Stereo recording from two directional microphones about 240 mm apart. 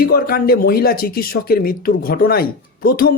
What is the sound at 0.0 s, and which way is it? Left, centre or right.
Speech, left.